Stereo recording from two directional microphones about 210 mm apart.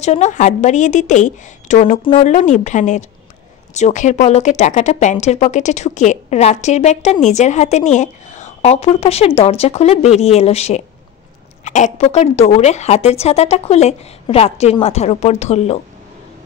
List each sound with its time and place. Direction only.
0.0 s a woman's voice: 35° left (ahead or behind)